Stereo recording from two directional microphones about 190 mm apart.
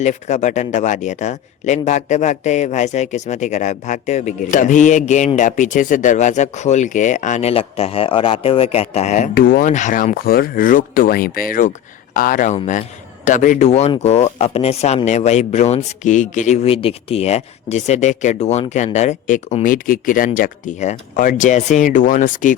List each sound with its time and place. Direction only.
0.0 s speech: 40° left (ahead or behind)